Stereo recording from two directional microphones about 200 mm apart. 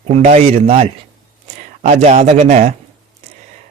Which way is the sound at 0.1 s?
30° right (ahead or behind).